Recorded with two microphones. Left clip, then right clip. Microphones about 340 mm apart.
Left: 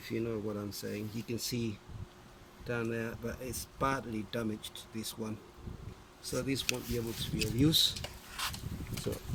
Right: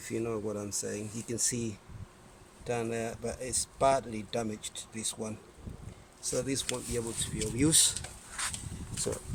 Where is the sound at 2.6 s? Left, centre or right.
Centre.